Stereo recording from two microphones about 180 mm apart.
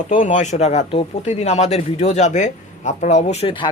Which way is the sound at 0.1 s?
45° left (ahead or behind).